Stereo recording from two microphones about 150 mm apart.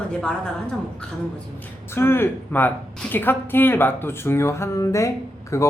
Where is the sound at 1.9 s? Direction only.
15° left (ahead or behind).